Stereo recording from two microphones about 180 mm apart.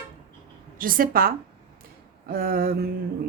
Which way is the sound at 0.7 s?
50° right (ahead or behind).